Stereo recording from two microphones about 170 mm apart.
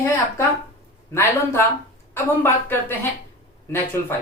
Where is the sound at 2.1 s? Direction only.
15° left (ahead or behind).